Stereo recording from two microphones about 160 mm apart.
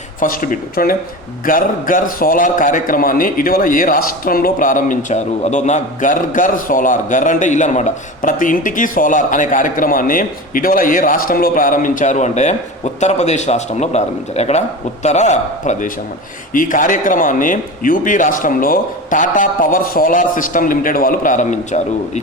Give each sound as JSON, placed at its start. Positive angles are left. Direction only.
{"t": 0.2, "sound": "a man's voice", "side_deg": 60}